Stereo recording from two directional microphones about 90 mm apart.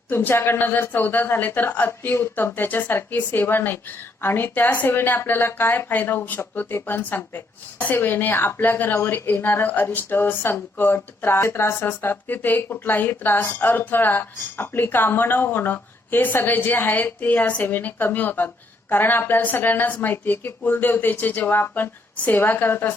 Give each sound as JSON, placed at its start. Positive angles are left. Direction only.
{"t": 0.1, "sound": "a woman's voice", "side_deg": 25}